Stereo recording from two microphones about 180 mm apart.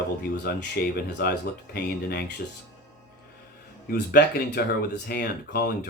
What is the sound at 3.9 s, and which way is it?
Speech, 70° left (ahead or behind).